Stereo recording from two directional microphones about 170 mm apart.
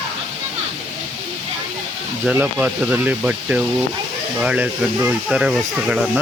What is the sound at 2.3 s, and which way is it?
Speech, 10° right (ahead or behind).